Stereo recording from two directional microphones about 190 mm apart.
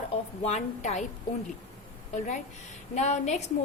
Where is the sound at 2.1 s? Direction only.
40° left (ahead or behind).